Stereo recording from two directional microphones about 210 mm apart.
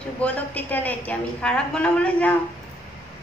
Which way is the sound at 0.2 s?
10° left (ahead or behind).